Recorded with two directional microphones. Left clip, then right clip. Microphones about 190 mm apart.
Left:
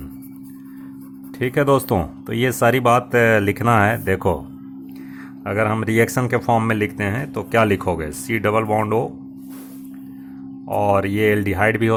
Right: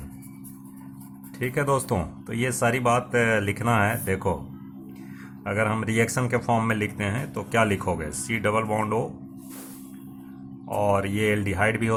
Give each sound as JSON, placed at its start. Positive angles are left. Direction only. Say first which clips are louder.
{"t": 1.4, "sound": "speech", "louder": "left 7 dB", "side_deg": 40}
{"t": 5.5, "sound": "speech", "louder": "left 5 dB", "side_deg": 35}
{"t": 10.8, "sound": "speech", "louder": "left 6 dB", "side_deg": 35}